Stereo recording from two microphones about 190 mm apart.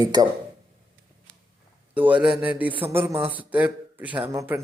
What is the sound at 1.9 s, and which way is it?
Speech, 5° right (ahead or behind).